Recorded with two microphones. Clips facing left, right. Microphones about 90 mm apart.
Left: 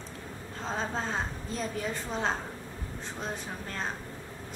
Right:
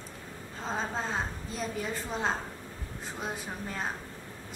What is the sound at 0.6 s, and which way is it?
A woman's voice, centre (ahead or behind).